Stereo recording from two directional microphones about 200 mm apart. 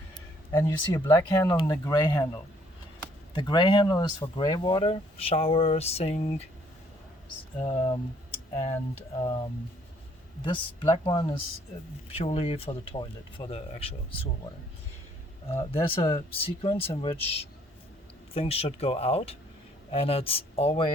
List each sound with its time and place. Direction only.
0.5 s speech: 15° left (ahead or behind); by 6.4 s 30° left (ahead or behind)
7.6 s speech: 25° left (ahead or behind)
9.1 s speech: 25° left (ahead or behind)
10.4 s speech: 25° left (ahead or behind)
15.7 s speech: 30° left (ahead or behind)